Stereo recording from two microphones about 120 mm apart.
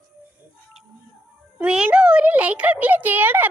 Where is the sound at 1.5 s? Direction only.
10° right (ahead or behind).